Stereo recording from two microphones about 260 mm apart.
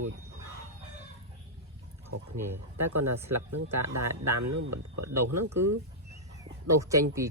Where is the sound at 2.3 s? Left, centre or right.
Right.